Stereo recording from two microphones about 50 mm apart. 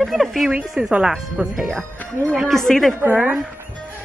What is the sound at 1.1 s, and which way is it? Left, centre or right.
Speech, centre.